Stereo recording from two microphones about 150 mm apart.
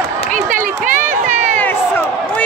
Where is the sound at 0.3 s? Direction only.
60° right (ahead or behind).